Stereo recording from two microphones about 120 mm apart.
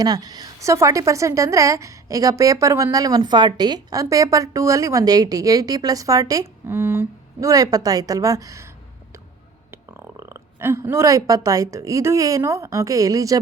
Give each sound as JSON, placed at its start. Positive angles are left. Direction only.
{"t": 0.0, "sound": "a woman's voice", "side_deg": -35}
{"t": 9.7, "sound": "speech", "side_deg": -20}